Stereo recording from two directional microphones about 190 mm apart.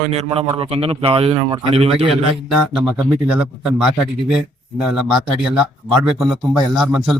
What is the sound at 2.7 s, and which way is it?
Speech, 5° right (ahead or behind).